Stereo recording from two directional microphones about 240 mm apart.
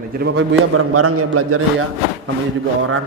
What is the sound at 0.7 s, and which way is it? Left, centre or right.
A man's voice, right.